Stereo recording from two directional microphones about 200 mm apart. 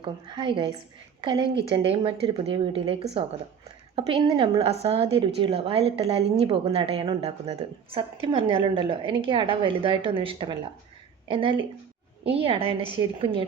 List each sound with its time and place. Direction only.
0.0 s a woman's voice: 25° right (ahead or behind)